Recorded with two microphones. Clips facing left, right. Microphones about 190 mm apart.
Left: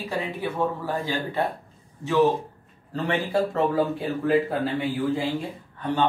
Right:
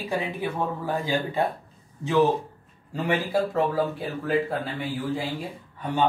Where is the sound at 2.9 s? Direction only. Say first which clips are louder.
Even; 10° right (ahead or behind).